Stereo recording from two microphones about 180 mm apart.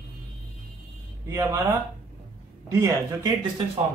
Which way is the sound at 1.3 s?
15° right (ahead or behind).